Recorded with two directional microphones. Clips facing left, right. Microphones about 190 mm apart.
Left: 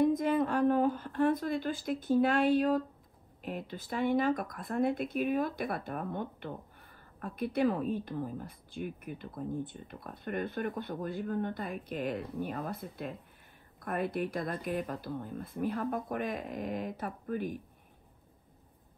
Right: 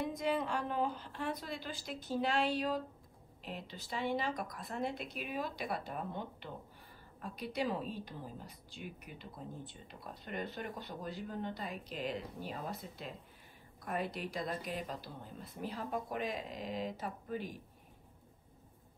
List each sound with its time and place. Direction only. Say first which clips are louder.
0.2 s a woman's voice: left 7 dB; 50° left (ahead or behind)